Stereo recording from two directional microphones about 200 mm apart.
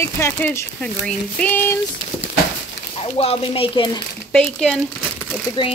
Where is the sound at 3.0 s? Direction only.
30° left (ahead or behind).